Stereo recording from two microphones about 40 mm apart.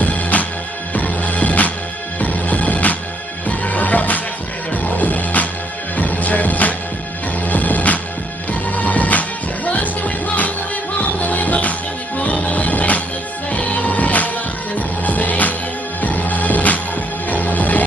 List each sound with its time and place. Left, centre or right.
0.0 s music: left